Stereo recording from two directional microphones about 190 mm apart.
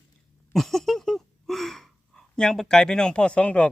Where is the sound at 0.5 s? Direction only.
Centre (ahead or behind).